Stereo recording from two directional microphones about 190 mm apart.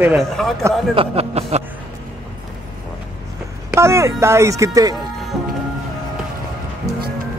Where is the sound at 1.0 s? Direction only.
35° right (ahead or behind).